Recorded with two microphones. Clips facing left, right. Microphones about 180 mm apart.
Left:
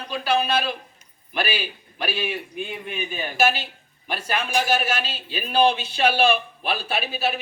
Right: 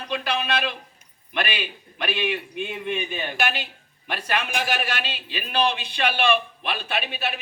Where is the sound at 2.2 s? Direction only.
Centre (ahead or behind).